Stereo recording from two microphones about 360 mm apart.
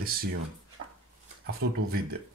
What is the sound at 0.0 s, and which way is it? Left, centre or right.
Speech, right.